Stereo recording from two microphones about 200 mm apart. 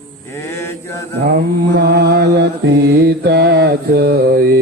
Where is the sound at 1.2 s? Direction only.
55° right (ahead or behind).